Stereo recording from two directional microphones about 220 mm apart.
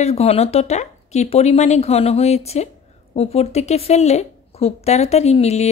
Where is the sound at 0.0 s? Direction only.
30° left (ahead or behind).